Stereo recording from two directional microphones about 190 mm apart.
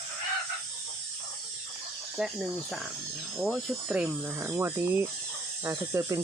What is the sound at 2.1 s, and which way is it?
Speech, centre (ahead or behind).